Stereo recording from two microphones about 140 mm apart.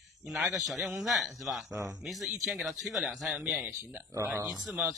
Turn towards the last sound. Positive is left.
turn(degrees=-5)  # may be behind; listen again after turning